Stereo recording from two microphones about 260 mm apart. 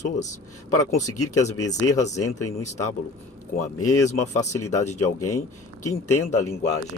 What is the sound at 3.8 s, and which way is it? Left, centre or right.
Speech, left.